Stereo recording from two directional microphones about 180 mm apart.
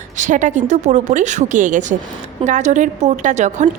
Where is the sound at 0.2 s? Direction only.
45° right (ahead or behind).